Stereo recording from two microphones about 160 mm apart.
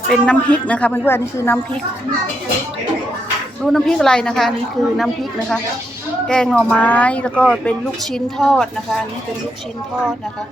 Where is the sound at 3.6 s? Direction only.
Centre (ahead or behind).